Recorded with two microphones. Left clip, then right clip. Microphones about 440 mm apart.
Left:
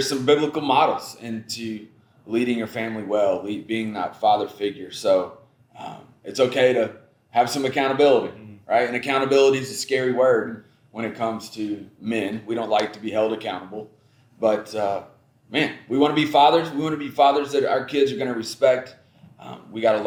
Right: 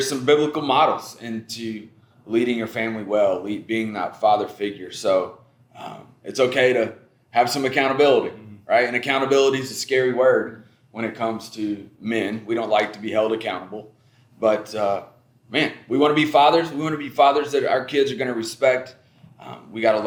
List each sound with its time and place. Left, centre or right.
0.0 s a man's voice: centre